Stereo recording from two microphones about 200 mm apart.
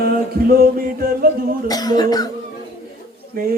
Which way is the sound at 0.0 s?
50° right (ahead or behind).